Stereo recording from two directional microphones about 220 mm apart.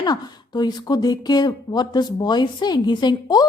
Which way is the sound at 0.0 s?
20° left (ahead or behind).